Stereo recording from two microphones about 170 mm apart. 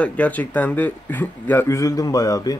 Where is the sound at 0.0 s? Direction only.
10° left (ahead or behind).